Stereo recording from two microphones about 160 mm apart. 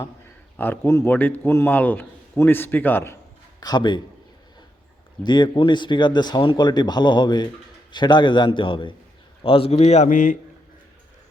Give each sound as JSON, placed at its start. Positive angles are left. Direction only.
{"t": 0.5, "sound": "a man's voice", "side_deg": 10}
{"t": 3.6, "sound": "speech", "side_deg": 25}
{"t": 5.2, "sound": "a man's voice", "side_deg": 30}